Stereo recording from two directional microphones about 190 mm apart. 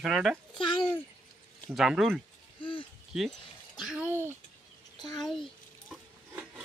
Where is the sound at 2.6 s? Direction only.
25° left (ahead or behind).